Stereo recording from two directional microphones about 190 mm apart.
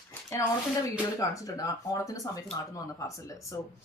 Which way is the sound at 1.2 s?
15° left (ahead or behind).